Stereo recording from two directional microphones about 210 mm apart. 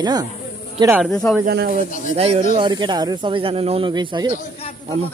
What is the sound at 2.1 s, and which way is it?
Speech, 30° right (ahead or behind).